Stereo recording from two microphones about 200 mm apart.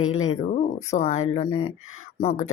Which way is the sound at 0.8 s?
35° left (ahead or behind).